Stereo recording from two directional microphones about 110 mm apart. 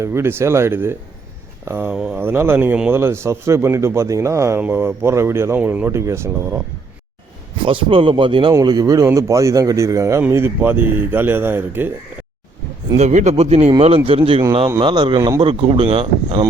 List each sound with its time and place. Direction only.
0.0 s speech: 20° right (ahead or behind)
1.9 s speech: 10° right (ahead or behind)
2.1 s speech: 20° right (ahead or behind)
7.6 s a man's voice: 50° right (ahead or behind)
8.6 s speech: 35° right (ahead or behind); by 11.9 s 20° right (ahead or behind)
13.0 s speech: 90° right
13.4 s speech: 70° right (ahead or behind)
14.8 s a man's voice: 45° right (ahead or behind)